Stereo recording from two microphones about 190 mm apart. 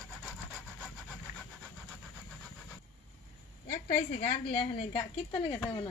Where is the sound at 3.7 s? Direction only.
45° left (ahead or behind).